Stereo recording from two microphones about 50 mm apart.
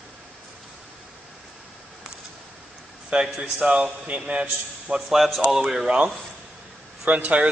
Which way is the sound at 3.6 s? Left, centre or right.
Right.